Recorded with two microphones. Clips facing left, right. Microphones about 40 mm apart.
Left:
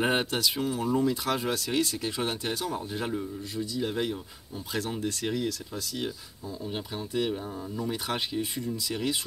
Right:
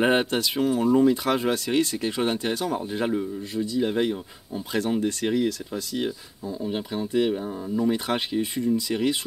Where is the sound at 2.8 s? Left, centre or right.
Centre.